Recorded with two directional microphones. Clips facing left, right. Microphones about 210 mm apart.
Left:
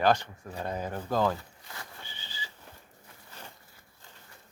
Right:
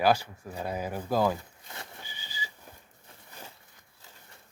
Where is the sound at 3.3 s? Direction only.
10° right (ahead or behind).